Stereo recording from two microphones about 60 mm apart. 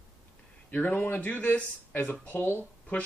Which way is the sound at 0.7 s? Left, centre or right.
Left.